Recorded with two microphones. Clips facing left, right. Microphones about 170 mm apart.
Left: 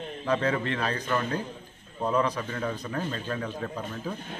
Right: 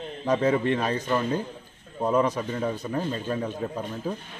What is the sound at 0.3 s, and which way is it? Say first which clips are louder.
A man's voice: right 4 dB; 15° right (ahead or behind).